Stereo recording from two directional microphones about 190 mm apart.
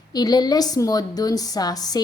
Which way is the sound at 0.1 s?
20° left (ahead or behind).